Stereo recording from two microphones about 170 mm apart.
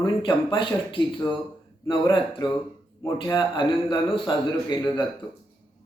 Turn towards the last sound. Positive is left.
turn(degrees=25)  # may be behind; listen again after turning